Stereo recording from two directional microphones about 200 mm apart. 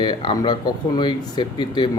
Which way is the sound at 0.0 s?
25° left (ahead or behind).